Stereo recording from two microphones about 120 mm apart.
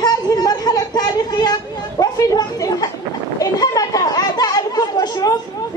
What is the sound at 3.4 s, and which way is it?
Chatter, 30° left (ahead or behind).